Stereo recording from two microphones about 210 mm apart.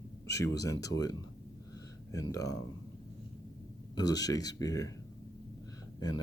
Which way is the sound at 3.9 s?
20° left (ahead or behind).